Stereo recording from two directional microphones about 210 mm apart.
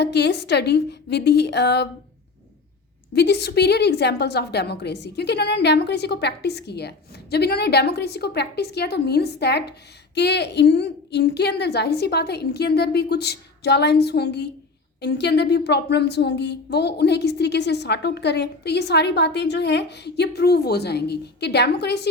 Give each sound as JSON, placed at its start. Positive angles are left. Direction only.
{"t": 0.0, "sound": "a woman's voice", "side_deg": 55}
{"t": 3.2, "sound": "a woman's voice", "side_deg": 50}